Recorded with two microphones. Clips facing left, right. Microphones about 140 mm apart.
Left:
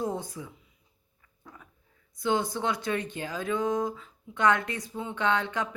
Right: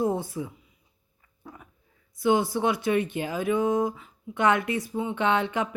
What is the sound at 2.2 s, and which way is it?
Speech, 15° right (ahead or behind).